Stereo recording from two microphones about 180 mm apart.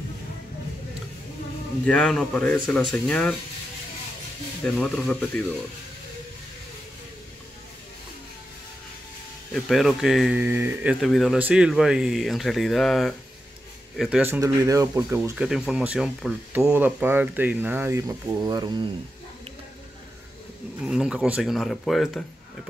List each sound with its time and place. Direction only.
1.9 s speech: 5° left (ahead or behind)
4.7 s speech: 5° left (ahead or behind)
9.5 s speech: centre (ahead or behind)
14.4 s speech: 20° right (ahead or behind)
15.3 s speech: 5° right (ahead or behind); by 18.9 s 25° right (ahead or behind)
20.8 s speech: 5° right (ahead or behind)